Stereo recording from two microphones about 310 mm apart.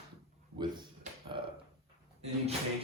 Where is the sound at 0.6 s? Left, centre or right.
Centre.